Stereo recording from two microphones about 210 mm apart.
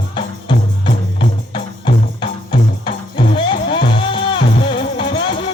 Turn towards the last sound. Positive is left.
turn(degrees=25)  # may be behind; listen again after turning